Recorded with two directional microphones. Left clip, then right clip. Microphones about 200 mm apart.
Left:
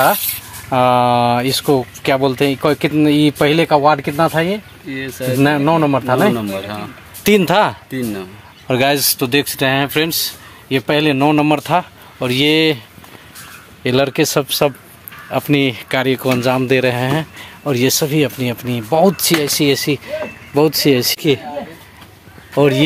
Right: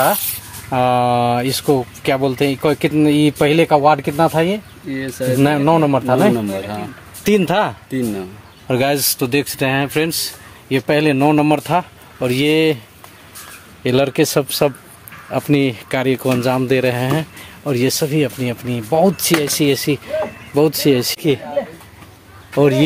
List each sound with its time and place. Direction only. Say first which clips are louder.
0.7 s speech: left 2 dB; 25° left (ahead or behind)
4.8 s speech: right 1 dB; 20° right (ahead or behind)
5.4 s speech: left 1 dB; 5° left (ahead or behind)
6.3 s speech: even; 10° right (ahead or behind)
7.2 s speech: left 3 dB; 20° left (ahead or behind)
8.6 s speech: left 2 dB; 10° left (ahead or behind)
13.8 s speech: even; 5° left (ahead or behind)
22.5 s speech: left 1 dB; centre (ahead or behind)